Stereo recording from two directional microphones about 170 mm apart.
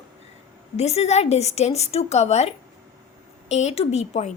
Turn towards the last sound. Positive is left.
turn(degrees=40)  # may be behind; listen again after turning